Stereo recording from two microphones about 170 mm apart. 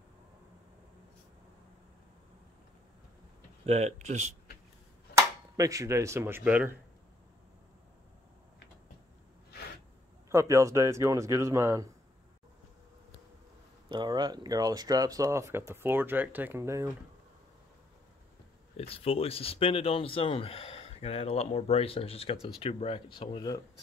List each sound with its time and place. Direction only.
3.6 s speech: 40° right (ahead or behind)
5.1 s speech: 20° right (ahead or behind)
10.3 s speech: 15° right (ahead or behind)
13.8 s speech: 25° right (ahead or behind)
18.8 s speech: 35° left (ahead or behind)